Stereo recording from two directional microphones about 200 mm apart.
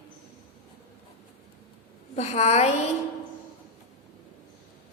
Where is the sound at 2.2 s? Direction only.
35° left (ahead or behind).